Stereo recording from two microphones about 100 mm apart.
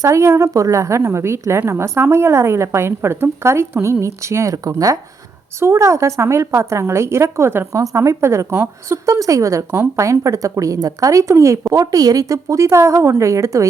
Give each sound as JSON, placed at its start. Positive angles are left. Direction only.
{"t": 0.0, "sound": "a woman's voice", "side_deg": -30}